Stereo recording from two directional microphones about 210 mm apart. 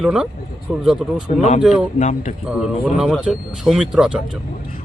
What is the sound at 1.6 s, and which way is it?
Speech, centre (ahead or behind).